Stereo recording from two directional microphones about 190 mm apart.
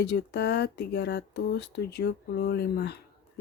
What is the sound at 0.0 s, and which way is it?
Speech, 60° left (ahead or behind).